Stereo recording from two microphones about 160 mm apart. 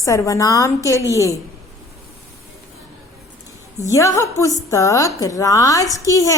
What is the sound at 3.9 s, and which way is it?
A woman's voice, 20° left (ahead or behind).